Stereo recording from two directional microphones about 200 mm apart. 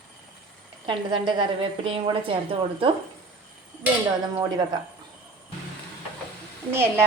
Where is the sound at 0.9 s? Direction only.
25° right (ahead or behind).